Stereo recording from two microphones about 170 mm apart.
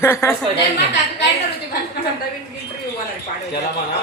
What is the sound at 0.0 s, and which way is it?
Speech, 15° left (ahead or behind).